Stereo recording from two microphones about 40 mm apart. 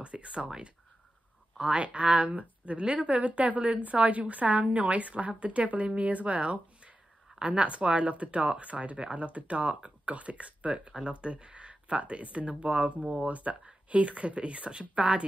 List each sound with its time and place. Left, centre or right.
0.0 s speech: right
1.6 s a woman's voice: right
10.9 s a woman's voice: right